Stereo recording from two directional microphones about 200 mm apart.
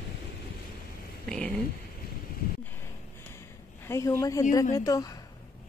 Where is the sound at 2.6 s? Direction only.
10° left (ahead or behind).